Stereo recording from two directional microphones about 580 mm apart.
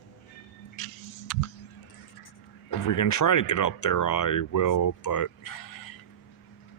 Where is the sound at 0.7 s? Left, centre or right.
Left.